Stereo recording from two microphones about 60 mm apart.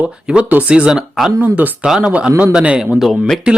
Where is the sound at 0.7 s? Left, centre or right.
Centre.